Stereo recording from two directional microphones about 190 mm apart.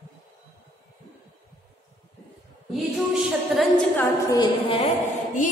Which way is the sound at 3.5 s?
Centre (ahead or behind).